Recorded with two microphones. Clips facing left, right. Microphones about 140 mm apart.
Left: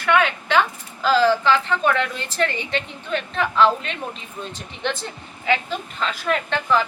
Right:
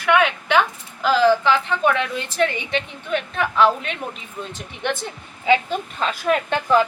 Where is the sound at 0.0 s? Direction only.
10° right (ahead or behind).